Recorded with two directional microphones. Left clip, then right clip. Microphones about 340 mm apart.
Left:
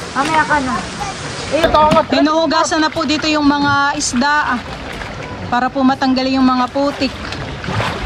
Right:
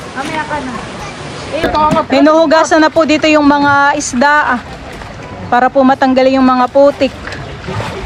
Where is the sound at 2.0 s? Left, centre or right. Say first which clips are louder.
Right 6 dB; centre.